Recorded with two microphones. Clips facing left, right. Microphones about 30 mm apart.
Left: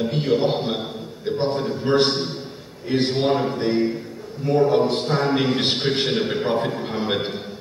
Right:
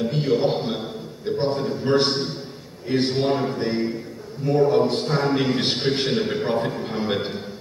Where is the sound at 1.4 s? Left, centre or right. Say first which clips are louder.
Left 1 dB; centre.